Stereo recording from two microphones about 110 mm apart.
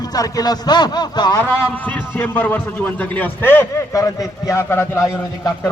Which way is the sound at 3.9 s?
30° left (ahead or behind).